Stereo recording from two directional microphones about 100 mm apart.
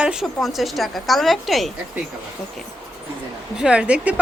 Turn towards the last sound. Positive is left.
turn(degrees=-10)  # may be behind; listen again after turning